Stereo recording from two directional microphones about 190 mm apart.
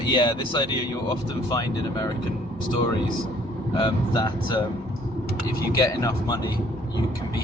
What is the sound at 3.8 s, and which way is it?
Speech, 20° left (ahead or behind).